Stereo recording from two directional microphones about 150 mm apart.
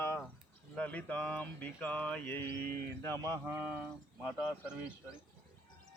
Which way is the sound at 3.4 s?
15° right (ahead or behind).